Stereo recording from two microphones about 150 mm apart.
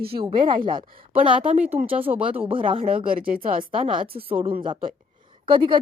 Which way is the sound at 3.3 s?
70° right (ahead or behind).